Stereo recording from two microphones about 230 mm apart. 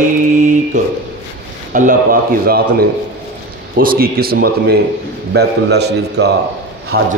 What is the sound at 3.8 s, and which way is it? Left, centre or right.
A man's voice, right.